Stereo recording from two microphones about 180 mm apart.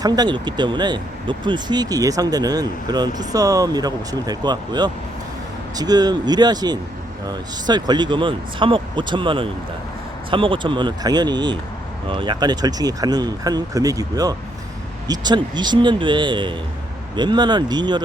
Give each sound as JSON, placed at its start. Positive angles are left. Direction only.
{"t": 0.0, "sound": "speech", "side_deg": -25}